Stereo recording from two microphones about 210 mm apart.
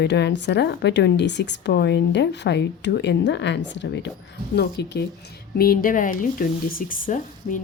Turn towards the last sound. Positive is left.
turn(degrees=40)  # may be behind; listen again after turning